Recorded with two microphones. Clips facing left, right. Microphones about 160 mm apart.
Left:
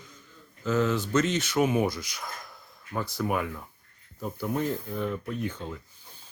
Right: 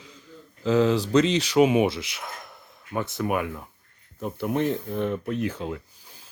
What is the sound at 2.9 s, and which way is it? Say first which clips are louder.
Speech: right 3 dB; 20° right (ahead or behind).